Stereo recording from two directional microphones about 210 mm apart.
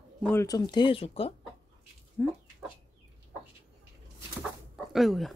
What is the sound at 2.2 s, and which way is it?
Speech, 10° left (ahead or behind).